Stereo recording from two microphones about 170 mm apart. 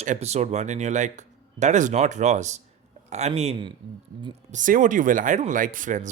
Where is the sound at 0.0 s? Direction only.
40° right (ahead or behind).